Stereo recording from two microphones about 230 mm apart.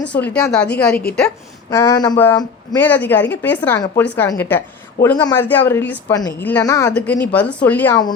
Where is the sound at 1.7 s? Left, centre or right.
Centre.